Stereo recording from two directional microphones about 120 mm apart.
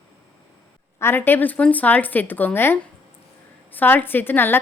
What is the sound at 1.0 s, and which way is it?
Speech, 20° left (ahead or behind).